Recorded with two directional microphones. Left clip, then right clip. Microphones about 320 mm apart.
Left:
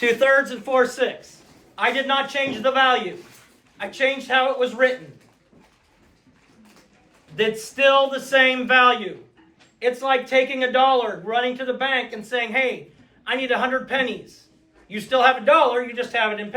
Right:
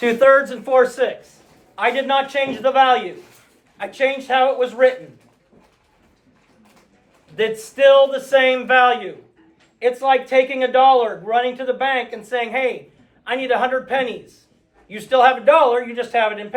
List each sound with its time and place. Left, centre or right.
0.0 s speech: centre
7.3 s speech: centre